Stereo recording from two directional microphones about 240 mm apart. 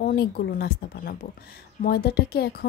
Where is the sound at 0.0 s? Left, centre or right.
Left.